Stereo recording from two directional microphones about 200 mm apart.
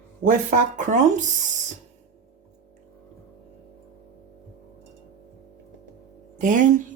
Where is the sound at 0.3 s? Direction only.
40° right (ahead or behind).